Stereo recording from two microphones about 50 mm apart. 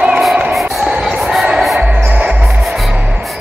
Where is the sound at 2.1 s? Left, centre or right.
Right.